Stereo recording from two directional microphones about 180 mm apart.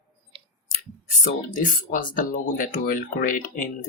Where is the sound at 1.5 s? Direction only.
50° left (ahead or behind).